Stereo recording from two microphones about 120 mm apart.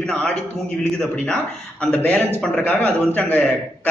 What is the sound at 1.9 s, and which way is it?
A man's voice, 10° left (ahead or behind).